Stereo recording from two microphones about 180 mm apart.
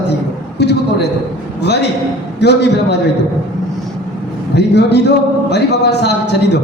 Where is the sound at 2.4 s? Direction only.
70° left (ahead or behind).